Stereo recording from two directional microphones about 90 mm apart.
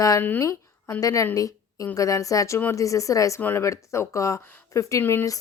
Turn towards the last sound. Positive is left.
turn(degrees=35)  # may be behind; listen again after turning